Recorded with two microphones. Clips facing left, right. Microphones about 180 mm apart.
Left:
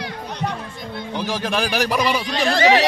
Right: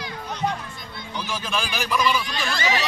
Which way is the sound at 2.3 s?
70° left (ahead or behind).